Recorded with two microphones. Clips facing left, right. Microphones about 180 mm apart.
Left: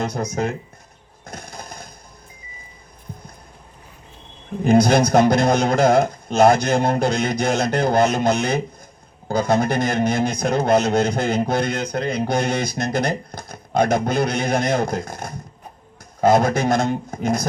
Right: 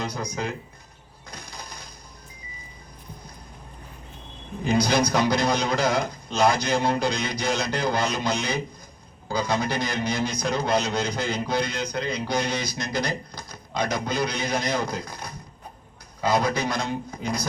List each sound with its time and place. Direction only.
0.0 s speech: 50° left (ahead or behind)
1.2 s a sound: 50° left (ahead or behind)
4.6 s speech: 55° left (ahead or behind)